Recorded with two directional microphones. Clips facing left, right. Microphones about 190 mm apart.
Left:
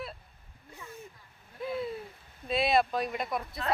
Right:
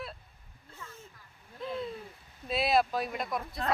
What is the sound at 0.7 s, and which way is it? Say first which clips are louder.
Speech: left 3 dB; 15° left (ahead or behind).